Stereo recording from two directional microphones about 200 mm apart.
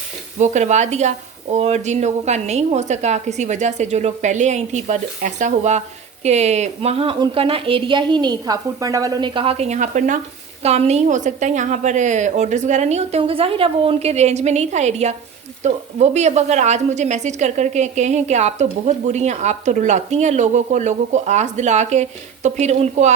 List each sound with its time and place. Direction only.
0.3 s a woman's voice: 35° right (ahead or behind)